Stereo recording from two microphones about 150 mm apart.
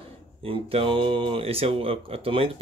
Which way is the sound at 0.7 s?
35° right (ahead or behind).